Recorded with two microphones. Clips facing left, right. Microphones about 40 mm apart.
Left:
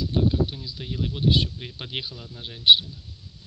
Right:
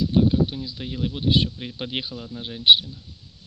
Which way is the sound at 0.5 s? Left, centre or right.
Centre.